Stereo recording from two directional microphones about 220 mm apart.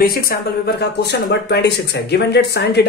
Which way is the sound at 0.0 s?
45° left (ahead or behind).